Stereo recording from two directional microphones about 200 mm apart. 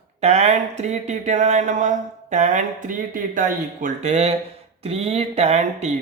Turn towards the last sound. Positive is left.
turn(degrees=-35)  # may be behind; listen again after turning